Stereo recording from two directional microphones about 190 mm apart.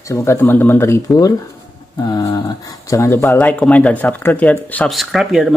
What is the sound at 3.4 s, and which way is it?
Speech, 5° left (ahead or behind).